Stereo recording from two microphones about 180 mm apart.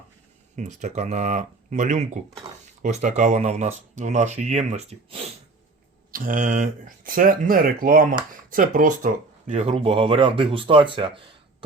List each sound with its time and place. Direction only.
0.5 s speech: 40° right (ahead or behind)
6.1 s speech: 50° right (ahead or behind)
9.5 s speech: 35° right (ahead or behind)